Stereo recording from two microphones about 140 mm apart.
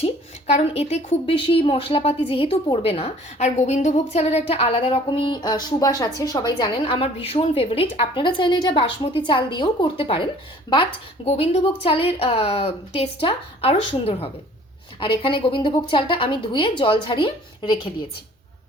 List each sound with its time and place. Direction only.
0.0 s a woman's voice: 50° left (ahead or behind)
11.3 s a woman's voice: 45° left (ahead or behind)